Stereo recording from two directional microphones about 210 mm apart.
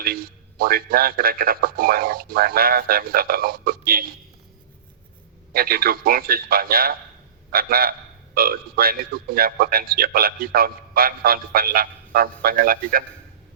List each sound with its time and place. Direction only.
0.0 s a man's voice: 45° right (ahead or behind)
5.5 s a man's voice: 45° right (ahead or behind)